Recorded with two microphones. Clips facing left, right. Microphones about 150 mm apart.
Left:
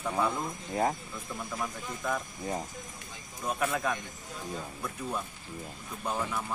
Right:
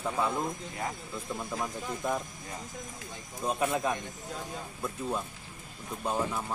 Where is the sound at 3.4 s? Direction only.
25° right (ahead or behind).